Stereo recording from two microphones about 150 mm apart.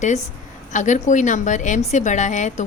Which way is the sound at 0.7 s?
55° left (ahead or behind).